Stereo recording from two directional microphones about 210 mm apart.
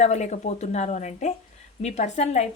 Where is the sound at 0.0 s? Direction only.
30° left (ahead or behind).